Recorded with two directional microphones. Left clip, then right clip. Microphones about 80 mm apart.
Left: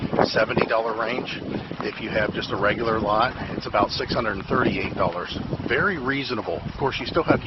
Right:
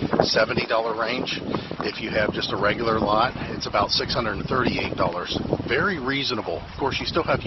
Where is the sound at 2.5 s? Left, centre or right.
Centre.